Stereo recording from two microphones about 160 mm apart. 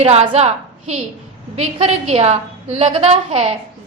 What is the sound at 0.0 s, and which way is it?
A woman's voice, 40° right (ahead or behind).